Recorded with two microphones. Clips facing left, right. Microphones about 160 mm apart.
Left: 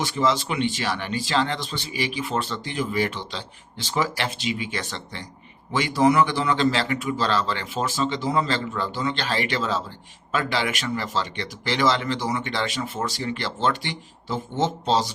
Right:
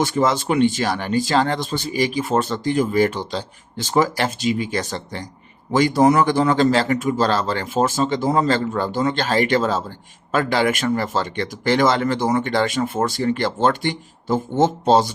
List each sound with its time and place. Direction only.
0.0 s speech: 50° right (ahead or behind)